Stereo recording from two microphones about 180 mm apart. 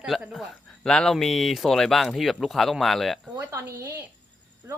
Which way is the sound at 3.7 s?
15° right (ahead or behind).